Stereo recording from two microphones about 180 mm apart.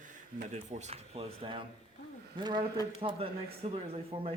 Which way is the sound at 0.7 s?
35° right (ahead or behind).